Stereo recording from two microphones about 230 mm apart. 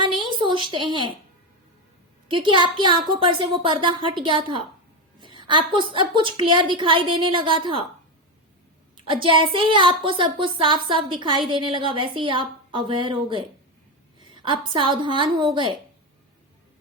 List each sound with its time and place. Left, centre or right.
0.0 s a sound: right
2.3 s speech: right
9.0 s a woman's voice: right